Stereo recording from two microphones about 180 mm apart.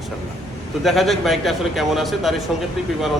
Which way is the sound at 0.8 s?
Centre (ahead or behind).